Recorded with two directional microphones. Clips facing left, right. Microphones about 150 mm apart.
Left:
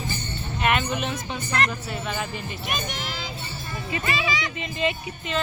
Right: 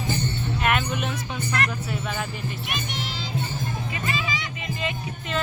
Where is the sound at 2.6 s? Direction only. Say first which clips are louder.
Left 1 dB; 45° left (ahead or behind).